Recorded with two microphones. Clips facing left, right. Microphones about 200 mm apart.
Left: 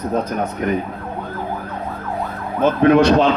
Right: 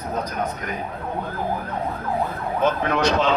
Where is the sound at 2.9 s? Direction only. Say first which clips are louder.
Left 8 dB; 55° left (ahead or behind).